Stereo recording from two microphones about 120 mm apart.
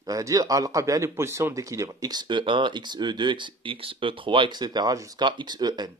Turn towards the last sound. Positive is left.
turn(degrees=-35)  # may be behind; listen again after turning